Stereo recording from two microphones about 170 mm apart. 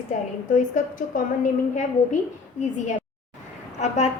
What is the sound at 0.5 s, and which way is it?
A woman's voice, 50° left (ahead or behind).